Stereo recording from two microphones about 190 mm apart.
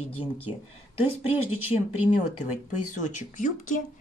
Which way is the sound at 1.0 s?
30° left (ahead or behind).